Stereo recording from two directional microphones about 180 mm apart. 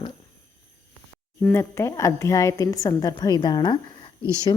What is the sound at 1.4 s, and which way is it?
A woman's voice, 15° left (ahead or behind).